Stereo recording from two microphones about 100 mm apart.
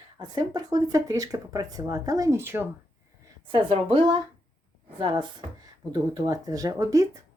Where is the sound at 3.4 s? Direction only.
65° right (ahead or behind).